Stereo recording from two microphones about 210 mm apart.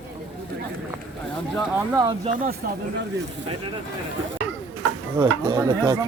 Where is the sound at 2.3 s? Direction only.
45° right (ahead or behind).